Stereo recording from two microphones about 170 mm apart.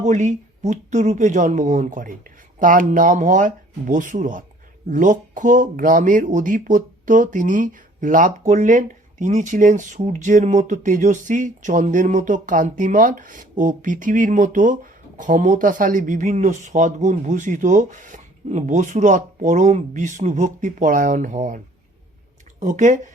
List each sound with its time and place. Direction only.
0.0 s speech: 45° right (ahead or behind)
22.6 s speech: 45° right (ahead or behind)